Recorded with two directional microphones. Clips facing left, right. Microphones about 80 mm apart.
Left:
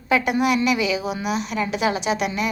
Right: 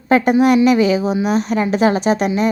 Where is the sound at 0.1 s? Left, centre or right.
Right.